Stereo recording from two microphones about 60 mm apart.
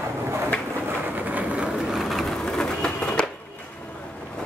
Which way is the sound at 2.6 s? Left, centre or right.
Centre.